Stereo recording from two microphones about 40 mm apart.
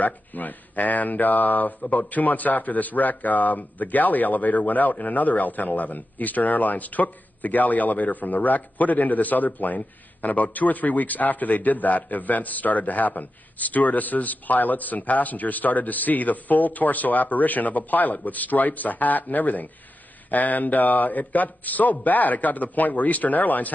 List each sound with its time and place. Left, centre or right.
0.0 s a man's voice: left